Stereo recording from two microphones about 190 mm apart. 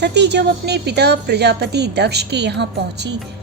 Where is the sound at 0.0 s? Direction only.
65° right (ahead or behind).